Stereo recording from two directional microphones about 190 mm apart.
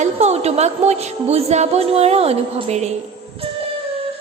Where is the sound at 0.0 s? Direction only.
35° right (ahead or behind).